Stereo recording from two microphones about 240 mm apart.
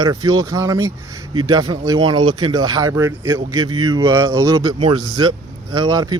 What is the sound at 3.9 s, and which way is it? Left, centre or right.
Speech, centre.